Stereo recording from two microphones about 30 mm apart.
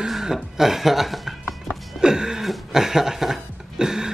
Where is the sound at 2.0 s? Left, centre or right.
Right.